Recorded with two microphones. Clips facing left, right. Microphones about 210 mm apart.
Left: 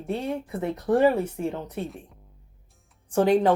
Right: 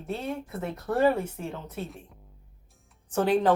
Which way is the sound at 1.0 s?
10° left (ahead or behind).